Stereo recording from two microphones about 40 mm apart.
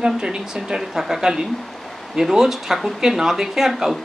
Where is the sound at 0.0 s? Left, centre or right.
Centre.